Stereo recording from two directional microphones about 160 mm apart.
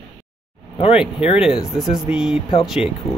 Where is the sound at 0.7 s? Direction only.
35° left (ahead or behind).